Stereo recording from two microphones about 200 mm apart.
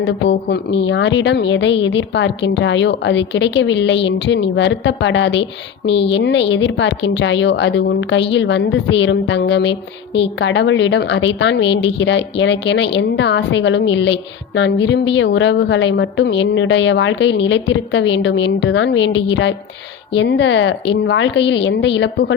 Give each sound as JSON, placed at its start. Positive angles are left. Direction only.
{"t": 0.0, "sound": "a woman's voice", "side_deg": 60}